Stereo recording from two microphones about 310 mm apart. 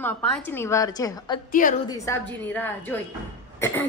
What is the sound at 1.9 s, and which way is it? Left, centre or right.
Speech, centre.